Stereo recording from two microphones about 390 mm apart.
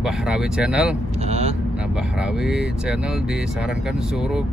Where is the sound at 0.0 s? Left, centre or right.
Centre.